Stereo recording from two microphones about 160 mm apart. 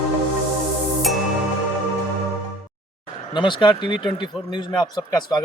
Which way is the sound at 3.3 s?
30° left (ahead or behind).